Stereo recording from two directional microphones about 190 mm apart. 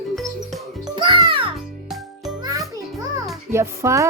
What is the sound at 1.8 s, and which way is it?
Music, centre (ahead or behind).